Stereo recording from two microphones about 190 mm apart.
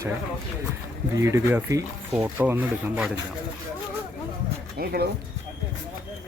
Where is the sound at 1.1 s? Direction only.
15° right (ahead or behind).